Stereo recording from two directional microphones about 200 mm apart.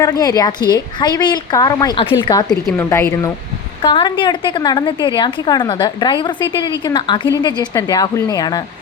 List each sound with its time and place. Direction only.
0.0 s a woman's voice: 20° left (ahead or behind)